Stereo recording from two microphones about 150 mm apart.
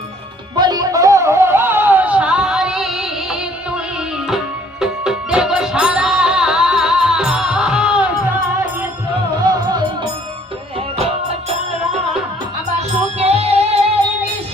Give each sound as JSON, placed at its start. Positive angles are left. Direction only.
{"t": 0.5, "sound": "music", "side_deg": -30}
{"t": 9.4, "sound": "music", "side_deg": -30}
{"t": 10.8, "sound": "music", "side_deg": -45}